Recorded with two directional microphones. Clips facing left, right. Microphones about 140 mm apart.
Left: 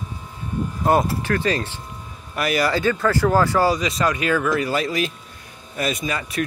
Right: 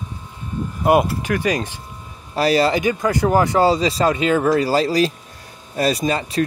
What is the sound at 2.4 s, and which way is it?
Speech, 30° right (ahead or behind).